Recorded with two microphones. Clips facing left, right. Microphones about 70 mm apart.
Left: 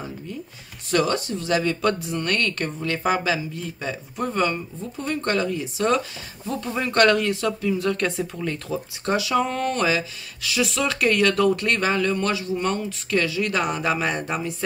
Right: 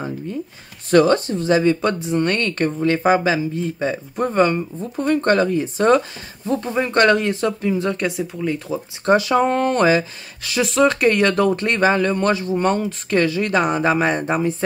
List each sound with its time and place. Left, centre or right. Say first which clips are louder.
0.8 s speech: right 8 dB; right
1.5 s speech: right 5 dB; right
8.0 s speech: right 3 dB; centre
9.0 s speech: right 7 dB; right